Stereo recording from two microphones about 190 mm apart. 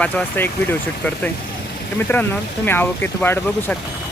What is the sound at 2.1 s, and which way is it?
Speech, 10° left (ahead or behind).